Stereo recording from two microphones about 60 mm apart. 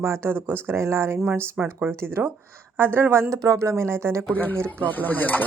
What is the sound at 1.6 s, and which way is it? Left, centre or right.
Speech, centre.